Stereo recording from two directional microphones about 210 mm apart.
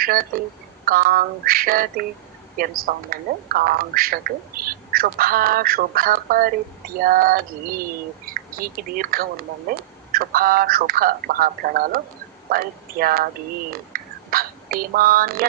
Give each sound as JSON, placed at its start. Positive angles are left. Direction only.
{"t": 0.0, "sound": "speech", "side_deg": -45}
{"t": 13.9, "sound": "throat clearing", "side_deg": -45}